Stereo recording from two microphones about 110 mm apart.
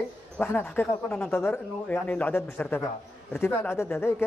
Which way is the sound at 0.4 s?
20° left (ahead or behind).